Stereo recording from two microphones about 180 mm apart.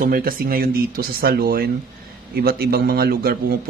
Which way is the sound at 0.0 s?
50° right (ahead or behind).